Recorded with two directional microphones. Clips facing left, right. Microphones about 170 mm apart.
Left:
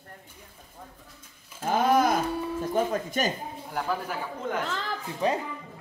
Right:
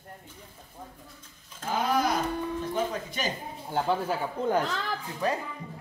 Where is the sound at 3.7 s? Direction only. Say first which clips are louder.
Right 4 dB; 30° right (ahead or behind).